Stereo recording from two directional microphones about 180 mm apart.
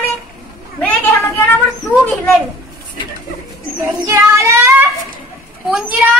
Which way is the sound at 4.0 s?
15° right (ahead or behind).